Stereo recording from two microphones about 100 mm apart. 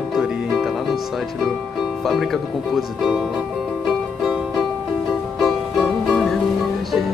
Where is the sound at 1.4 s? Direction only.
Centre (ahead or behind).